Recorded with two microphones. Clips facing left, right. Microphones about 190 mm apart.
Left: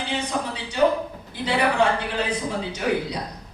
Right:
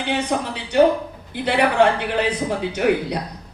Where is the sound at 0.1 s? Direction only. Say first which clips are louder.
Right 6 dB; 65° right (ahead or behind).